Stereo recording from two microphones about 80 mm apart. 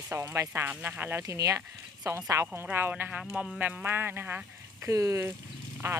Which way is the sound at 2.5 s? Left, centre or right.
Right.